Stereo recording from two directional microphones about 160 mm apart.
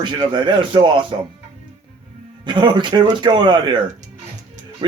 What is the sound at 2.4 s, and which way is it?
A man's voice, 30° right (ahead or behind).